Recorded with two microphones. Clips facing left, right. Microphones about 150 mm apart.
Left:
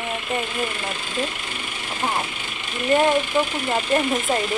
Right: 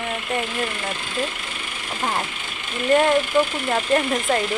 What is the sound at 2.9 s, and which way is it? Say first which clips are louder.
A woman's voice: right 1 dB; centre (ahead or behind).